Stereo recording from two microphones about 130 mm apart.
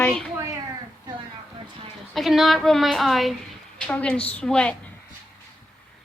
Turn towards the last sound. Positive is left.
turn(degrees=5)  # may be behind; listen again after turning